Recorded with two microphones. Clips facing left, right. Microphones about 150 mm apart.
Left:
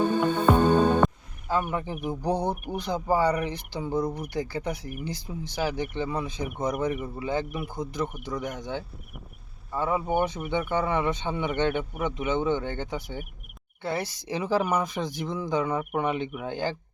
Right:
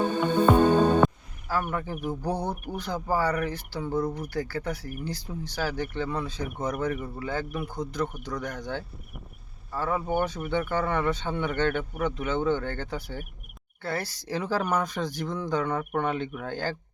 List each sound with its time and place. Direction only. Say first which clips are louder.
0.5 s music: even; centre (ahead or behind)
1.5 s speech: left 2 dB; 20° left (ahead or behind)